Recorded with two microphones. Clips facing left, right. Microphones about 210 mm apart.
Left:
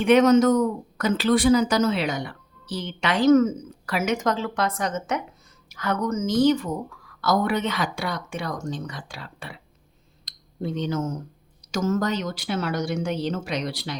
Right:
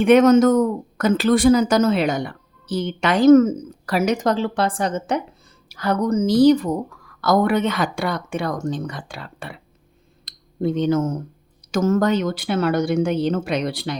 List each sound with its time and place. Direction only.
0.0 s speech: 50° right (ahead or behind)
7.2 s speech: 55° right (ahead or behind)
10.2 s a sound: 55° right (ahead or behind)
11.7 s speech: 55° right (ahead or behind)